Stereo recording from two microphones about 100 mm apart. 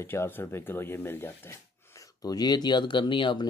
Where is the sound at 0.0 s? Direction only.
25° left (ahead or behind).